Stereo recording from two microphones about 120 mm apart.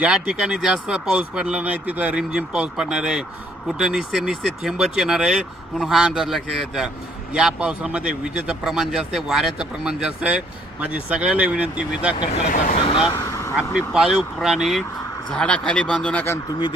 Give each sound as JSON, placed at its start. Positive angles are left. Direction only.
{"t": 0.0, "sound": "a man's voice", "side_deg": -10}
{"t": 12.3, "sound": "speech", "side_deg": 90}
{"t": 13.1, "sound": "vehicle", "side_deg": 25}
{"t": 13.6, "sound": "speech", "side_deg": -5}
{"t": 16.5, "sound": "speech", "side_deg": 40}